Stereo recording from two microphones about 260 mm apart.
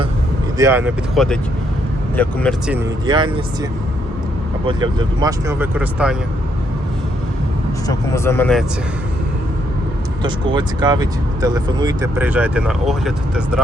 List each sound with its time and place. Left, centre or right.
0.6 s speech: centre
3.1 s speech: centre
7.9 s speech: centre
10.2 s speech: centre